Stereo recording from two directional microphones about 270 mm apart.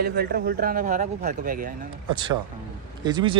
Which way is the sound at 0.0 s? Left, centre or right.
Right.